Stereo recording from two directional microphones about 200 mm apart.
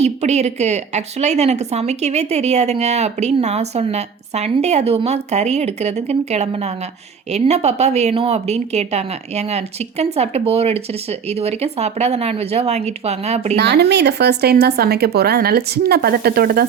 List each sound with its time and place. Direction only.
0.0 s a woman's voice: 35° right (ahead or behind)
13.6 s speech: 55° right (ahead or behind)